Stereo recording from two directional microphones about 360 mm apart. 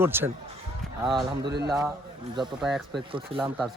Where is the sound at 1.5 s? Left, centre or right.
Right.